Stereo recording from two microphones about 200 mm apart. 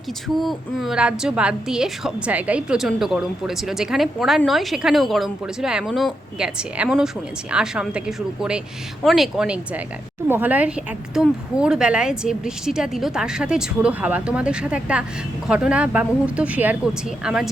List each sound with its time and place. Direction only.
0.3 s a woman's voice: centre (ahead or behind)